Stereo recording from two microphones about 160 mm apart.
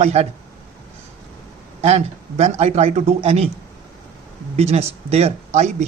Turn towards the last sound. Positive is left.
turn(degrees=-45)  # may be behind; listen again after turning